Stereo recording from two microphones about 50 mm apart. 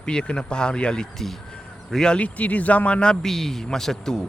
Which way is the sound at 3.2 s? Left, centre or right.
Centre.